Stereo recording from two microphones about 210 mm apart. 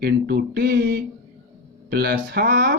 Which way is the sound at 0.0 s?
50° right (ahead or behind).